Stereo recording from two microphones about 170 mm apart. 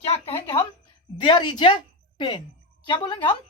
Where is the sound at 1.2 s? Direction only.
30° left (ahead or behind).